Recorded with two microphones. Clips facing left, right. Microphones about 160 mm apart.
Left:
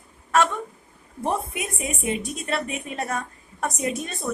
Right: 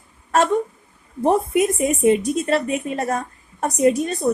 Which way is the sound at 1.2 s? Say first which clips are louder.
Right 10 dB; 40° right (ahead or behind).